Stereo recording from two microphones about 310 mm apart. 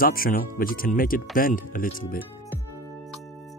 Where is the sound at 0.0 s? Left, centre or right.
Left.